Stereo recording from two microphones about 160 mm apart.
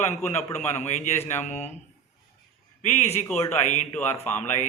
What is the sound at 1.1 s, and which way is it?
Speech, 15° left (ahead or behind).